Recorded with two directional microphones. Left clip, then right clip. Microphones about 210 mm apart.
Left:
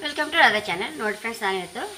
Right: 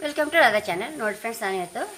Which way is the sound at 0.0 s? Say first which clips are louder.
Even; 50° right (ahead or behind).